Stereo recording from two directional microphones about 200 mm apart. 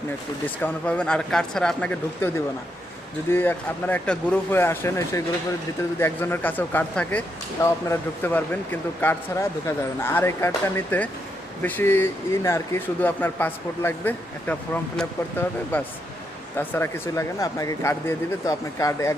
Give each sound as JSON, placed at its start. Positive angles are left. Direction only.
{"t": 0.4, "sound": "speech", "side_deg": 5}